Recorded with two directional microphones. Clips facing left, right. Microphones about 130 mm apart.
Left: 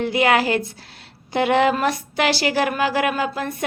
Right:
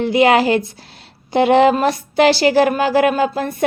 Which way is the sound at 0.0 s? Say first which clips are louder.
Right 5 dB; 25° right (ahead or behind).